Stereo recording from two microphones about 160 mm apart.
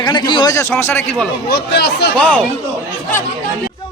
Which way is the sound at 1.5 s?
90° left.